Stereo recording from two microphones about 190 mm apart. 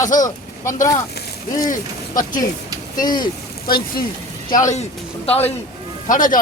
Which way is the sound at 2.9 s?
20° left (ahead or behind).